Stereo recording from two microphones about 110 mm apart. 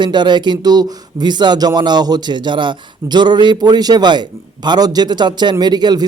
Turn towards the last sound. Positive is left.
turn(degrees=-40)  # may be behind; listen again after turning